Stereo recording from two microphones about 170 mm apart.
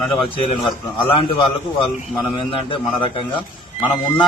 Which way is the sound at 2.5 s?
30° left (ahead or behind).